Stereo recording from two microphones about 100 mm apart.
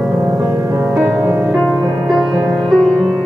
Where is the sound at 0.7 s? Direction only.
20° right (ahead or behind).